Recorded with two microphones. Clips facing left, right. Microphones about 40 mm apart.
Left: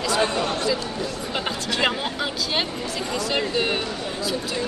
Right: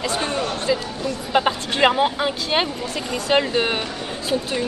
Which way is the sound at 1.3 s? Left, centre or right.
Right.